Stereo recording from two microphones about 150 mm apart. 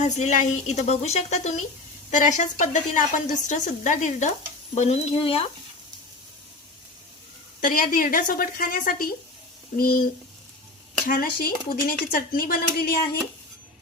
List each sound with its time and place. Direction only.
0.2 s a woman's voice: 50° left (ahead or behind)
4.7 s speech: 45° left (ahead or behind)
7.6 s speech: 70° left (ahead or behind)
11.0 s speech: 75° left (ahead or behind)